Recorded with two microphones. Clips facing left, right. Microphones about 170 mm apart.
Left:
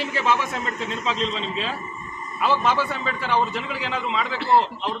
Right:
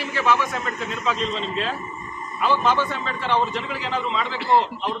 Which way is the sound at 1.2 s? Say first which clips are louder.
Right 1 dB; centre (ahead or behind).